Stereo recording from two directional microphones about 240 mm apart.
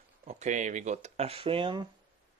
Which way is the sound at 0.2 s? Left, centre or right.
Right.